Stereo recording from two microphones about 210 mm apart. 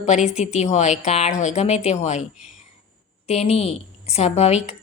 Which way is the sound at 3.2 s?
30° left (ahead or behind).